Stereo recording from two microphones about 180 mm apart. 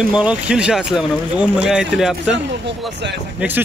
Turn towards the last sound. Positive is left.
turn(degrees=-10)  # may be behind; listen again after turning